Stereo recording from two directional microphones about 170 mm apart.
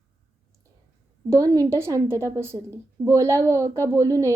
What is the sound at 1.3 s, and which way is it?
A woman's voice, 20° right (ahead or behind).